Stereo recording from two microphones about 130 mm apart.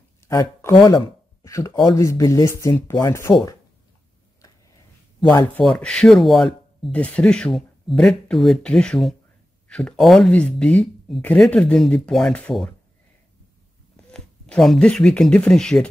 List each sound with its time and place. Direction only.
0.2 s a sound: 20° left (ahead or behind)
0.7 s speech: 40° left (ahead or behind)
1.4 s a sound: 25° left (ahead or behind)
2.0 s speech: 25° left (ahead or behind)
5.6 s speech: 5° left (ahead or behind)
14.1 s speech: 5° left (ahead or behind)